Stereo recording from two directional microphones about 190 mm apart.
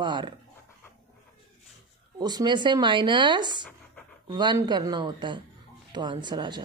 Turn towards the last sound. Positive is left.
turn(degrees=-25)  # may be behind; listen again after turning